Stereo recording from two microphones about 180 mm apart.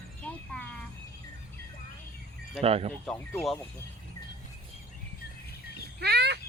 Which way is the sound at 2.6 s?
30° right (ahead or behind).